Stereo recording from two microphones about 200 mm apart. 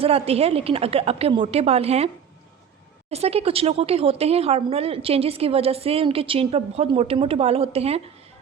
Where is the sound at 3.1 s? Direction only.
30° right (ahead or behind).